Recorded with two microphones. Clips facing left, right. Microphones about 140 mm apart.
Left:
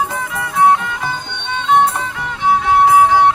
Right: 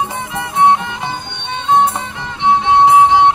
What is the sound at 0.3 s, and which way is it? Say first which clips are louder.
Music: right 1 dB; 25° right (ahead or behind).